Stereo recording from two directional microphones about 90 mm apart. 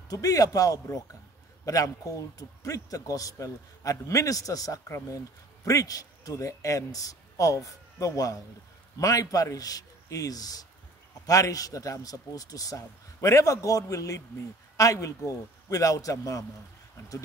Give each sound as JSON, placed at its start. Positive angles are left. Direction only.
{"t": 0.1, "sound": "a man's voice", "side_deg": 40}